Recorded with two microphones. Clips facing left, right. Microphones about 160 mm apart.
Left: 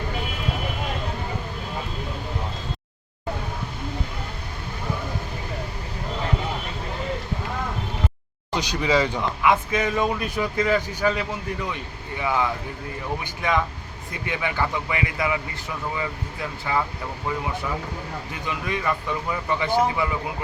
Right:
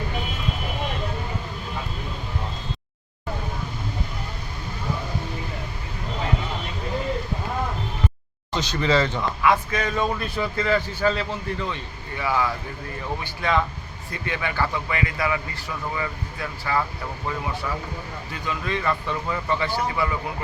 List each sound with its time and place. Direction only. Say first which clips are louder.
8.5 s a man's voice: even; 10° left (ahead or behind)